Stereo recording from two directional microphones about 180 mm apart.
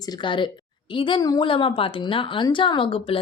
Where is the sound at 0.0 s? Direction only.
25° left (ahead or behind).